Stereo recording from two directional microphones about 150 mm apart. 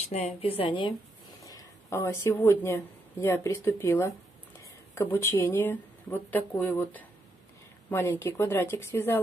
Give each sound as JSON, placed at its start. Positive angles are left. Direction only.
{"t": 0.0, "sound": "a woman's voice", "side_deg": 45}
{"t": 1.4, "sound": "a woman's voice", "side_deg": 20}